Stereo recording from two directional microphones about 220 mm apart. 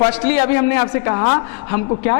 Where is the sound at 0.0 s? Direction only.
15° left (ahead or behind).